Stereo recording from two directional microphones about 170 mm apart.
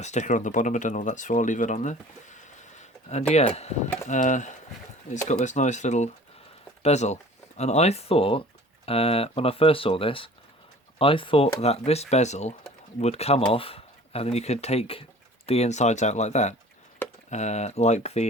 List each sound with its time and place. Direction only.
0.0 s speech: 45° left (ahead or behind)